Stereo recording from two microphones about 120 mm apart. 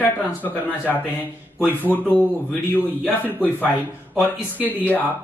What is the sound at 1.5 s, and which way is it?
Speech, 15° left (ahead or behind).